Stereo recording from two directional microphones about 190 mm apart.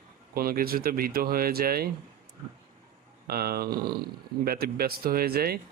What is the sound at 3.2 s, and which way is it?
Speech, 55° right (ahead or behind).